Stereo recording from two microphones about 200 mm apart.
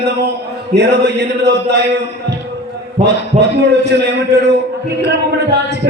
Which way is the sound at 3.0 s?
60° right (ahead or behind).